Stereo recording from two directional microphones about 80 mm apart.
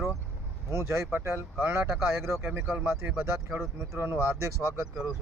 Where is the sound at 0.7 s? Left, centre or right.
Right.